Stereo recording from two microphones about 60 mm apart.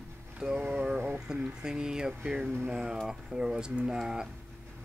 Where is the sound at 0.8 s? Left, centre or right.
Centre.